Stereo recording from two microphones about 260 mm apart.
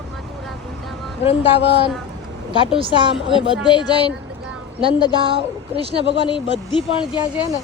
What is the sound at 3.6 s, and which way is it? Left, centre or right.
Speech, centre.